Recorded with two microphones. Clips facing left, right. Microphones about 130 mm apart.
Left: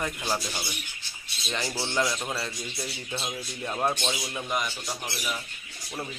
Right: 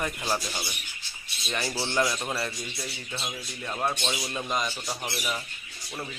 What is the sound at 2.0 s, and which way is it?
Speech, 15° right (ahead or behind).